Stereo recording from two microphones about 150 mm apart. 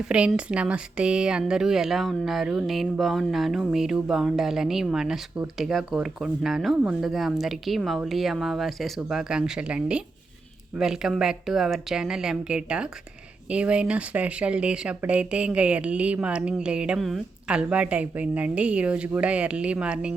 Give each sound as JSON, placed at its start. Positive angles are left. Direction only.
{"t": 0.1, "sound": "speech", "side_deg": -5}